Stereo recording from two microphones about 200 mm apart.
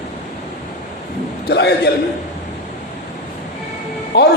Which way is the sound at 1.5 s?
55° left (ahead or behind).